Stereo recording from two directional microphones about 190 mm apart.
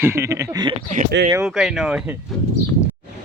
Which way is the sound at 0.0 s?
15° right (ahead or behind).